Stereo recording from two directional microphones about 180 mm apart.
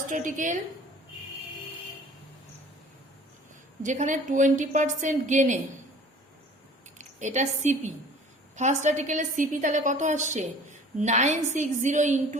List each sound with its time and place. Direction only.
0.1 s a woman's voice: 45° right (ahead or behind)
3.8 s a woman's voice: 45° right (ahead or behind)
7.0 s a woman's voice: 40° right (ahead or behind)